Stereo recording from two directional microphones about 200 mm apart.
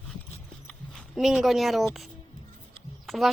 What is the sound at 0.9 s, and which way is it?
Speech, centre (ahead or behind).